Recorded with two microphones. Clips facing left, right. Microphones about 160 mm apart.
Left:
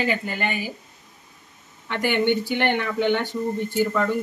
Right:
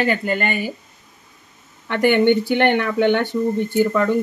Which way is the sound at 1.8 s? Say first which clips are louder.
Right 7 dB; 55° right (ahead or behind).